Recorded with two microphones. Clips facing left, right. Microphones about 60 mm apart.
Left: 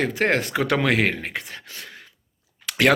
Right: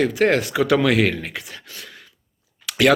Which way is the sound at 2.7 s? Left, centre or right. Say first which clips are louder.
Right 2 dB; left.